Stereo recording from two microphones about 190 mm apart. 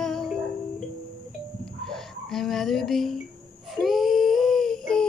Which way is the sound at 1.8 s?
Centre (ahead or behind).